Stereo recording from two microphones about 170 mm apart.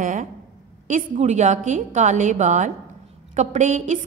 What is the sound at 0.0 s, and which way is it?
A woman's voice, 50° right (ahead or behind).